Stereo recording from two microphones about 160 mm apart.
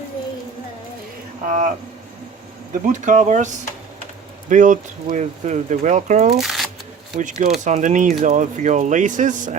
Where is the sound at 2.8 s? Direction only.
50° right (ahead or behind).